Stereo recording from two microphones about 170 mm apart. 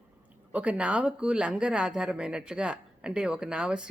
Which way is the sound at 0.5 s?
5° right (ahead or behind).